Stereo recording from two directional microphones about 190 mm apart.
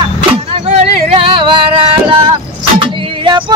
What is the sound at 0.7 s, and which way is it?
Music, 25° right (ahead or behind).